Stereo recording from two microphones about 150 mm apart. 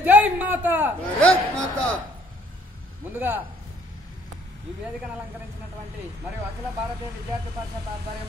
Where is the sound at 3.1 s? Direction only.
10° right (ahead or behind).